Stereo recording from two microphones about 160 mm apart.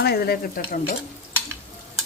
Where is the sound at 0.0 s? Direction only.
75° left (ahead or behind).